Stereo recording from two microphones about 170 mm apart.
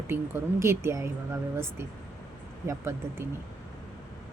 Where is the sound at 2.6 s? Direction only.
15° right (ahead or behind).